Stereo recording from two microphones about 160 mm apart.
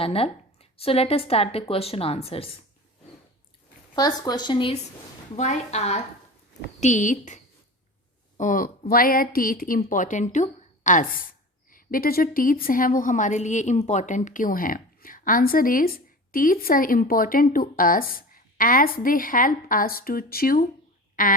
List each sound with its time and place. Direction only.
0.0 s a woman's voice: 35° left (ahead or behind)
3.9 s speech: 25° left (ahead or behind)
5.4 s a woman's voice: 45° left (ahead or behind)
11.7 s a woman's voice: 65° left (ahead or behind)